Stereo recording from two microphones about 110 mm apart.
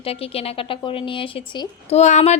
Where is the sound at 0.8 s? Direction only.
50° left (ahead or behind).